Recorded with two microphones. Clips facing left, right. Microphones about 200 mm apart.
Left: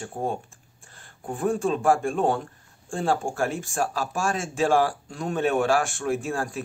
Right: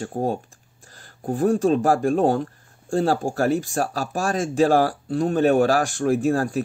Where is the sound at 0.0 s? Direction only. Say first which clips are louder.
Right 5 dB; 40° right (ahead or behind).